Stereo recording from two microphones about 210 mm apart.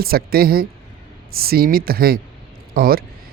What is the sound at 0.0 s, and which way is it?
Speech, 45° right (ahead or behind).